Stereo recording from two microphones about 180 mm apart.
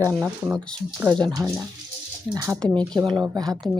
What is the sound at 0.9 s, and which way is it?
Speech, 20° right (ahead or behind).